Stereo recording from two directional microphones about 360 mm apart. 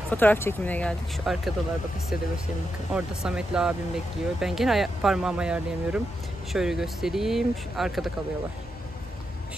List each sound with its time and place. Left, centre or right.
0.1 s speech: centre
2.9 s speech: centre